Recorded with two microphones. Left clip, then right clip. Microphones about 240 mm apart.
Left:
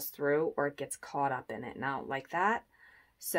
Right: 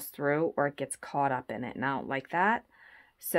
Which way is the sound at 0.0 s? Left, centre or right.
Right.